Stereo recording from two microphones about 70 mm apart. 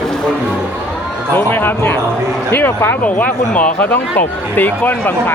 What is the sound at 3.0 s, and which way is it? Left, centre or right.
Speech, left.